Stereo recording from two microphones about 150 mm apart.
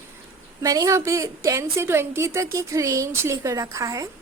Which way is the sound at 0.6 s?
25° right (ahead or behind).